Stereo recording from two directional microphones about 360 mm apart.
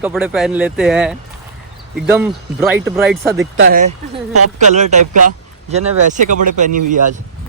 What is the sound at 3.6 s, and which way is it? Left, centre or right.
Speech, right.